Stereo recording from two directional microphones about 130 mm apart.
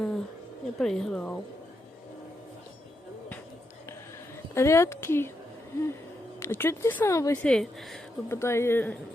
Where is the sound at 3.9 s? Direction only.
20° left (ahead or behind).